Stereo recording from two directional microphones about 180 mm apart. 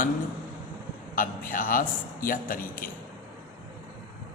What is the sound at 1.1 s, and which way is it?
Music, 50° left (ahead or behind).